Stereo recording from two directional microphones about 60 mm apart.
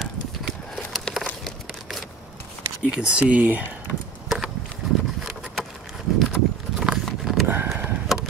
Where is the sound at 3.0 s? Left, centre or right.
Centre.